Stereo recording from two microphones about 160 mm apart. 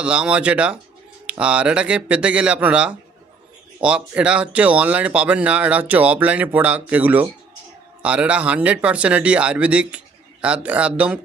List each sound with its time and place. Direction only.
0.0 s speech: 5° right (ahead or behind)